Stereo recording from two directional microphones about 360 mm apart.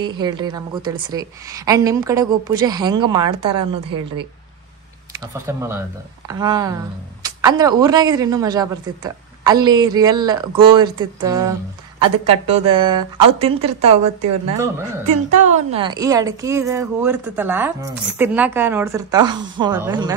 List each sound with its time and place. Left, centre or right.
0.0 s a woman's voice: centre
5.3 s a woman's voice: centre
15.4 s a woman's voice: centre